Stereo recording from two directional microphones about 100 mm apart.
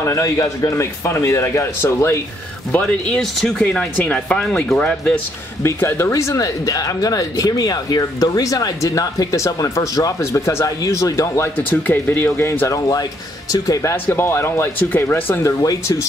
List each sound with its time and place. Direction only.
0.0 s a man's voice: 30° left (ahead or behind)
2.7 s speech: 15° left (ahead or behind)
3.2 s speech: 5° left (ahead or behind)
5.6 s speech: 25° left (ahead or behind)
11.7 s a man's voice: 20° left (ahead or behind); by 13.9 s 35° left (ahead or behind)
14.0 s a man's voice: 25° left (ahead or behind)
15.6 s speech: 35° left (ahead or behind)